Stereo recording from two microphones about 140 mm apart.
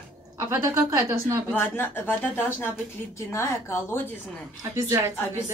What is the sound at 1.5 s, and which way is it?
A woman's voice, 15° left (ahead or behind).